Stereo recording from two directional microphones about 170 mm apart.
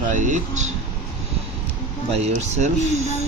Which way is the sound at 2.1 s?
40° right (ahead or behind).